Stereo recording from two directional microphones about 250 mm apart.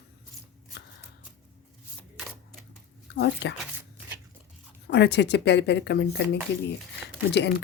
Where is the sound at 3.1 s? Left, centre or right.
Left.